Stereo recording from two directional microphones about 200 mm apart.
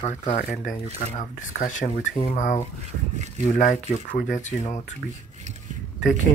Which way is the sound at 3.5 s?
40° left (ahead or behind).